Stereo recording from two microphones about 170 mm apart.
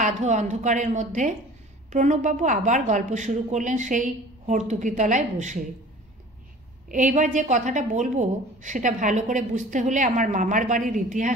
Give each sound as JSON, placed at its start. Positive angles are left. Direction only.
{"t": 0.0, "sound": "a woman's voice", "side_deg": -45}
{"t": 6.9, "sound": "a woman's voice", "side_deg": -50}